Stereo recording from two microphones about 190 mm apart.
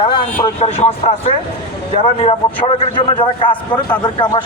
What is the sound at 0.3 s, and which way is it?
A man's voice, 30° left (ahead or behind).